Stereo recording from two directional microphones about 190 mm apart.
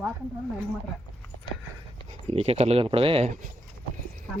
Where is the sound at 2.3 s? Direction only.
35° right (ahead or behind).